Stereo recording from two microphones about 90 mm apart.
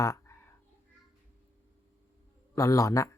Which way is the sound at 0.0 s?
35° left (ahead or behind).